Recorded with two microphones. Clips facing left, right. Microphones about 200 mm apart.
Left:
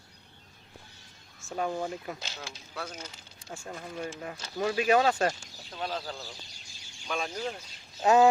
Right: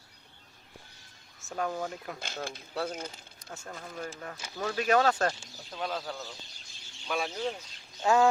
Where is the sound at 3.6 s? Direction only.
10° left (ahead or behind).